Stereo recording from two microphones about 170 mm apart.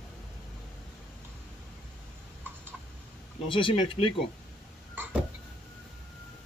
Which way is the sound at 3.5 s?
30° left (ahead or behind).